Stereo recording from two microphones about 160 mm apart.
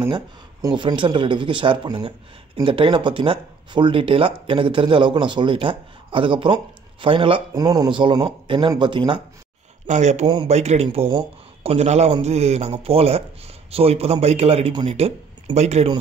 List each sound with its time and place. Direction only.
0.0 s speech: 20° right (ahead or behind)
9.8 s speech: 45° right (ahead or behind)
10.2 s speech: 30° right (ahead or behind)
10.5 s speech: 45° right (ahead or behind)